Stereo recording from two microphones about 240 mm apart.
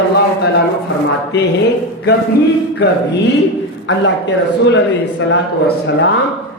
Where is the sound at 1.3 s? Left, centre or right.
Left.